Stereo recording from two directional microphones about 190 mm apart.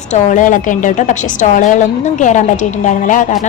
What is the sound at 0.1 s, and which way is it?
A woman's voice, 40° left (ahead or behind).